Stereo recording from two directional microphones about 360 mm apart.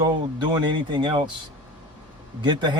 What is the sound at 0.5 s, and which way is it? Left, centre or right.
Speech, centre.